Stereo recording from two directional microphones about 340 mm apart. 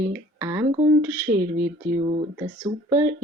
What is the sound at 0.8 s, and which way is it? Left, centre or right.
Speech, right.